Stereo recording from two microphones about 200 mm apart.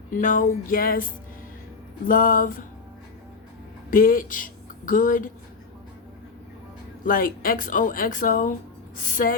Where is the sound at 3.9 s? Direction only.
45° left (ahead or behind).